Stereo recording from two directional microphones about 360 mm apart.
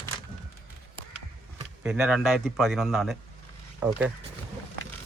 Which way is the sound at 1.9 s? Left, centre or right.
Centre.